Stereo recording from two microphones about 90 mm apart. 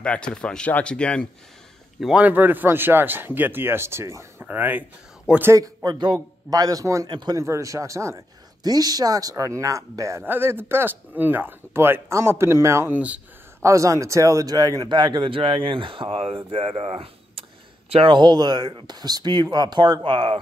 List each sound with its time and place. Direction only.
0.0 s speech: 10° left (ahead or behind)
2.0 s a man's voice: 5° right (ahead or behind)
2.2 s speech: 20° right (ahead or behind)
4.4 s speech: 20° right (ahead or behind)
5.3 s speech: 10° right (ahead or behind)
5.6 s speech: 45° right (ahead or behind)
6.1 s speech: 40° right (ahead or behind)
7.1 s speech: 55° right (ahead or behind)
7.3 s speech: 35° right (ahead or behind)
8.6 s speech: 45° right (ahead or behind)
10.2 s speech: 25° right (ahead or behind)
12.9 s speech: 15° right (ahead or behind)
13.6 s speech: 35° right (ahead or behind); by 20.3 s 75° right (ahead or behind)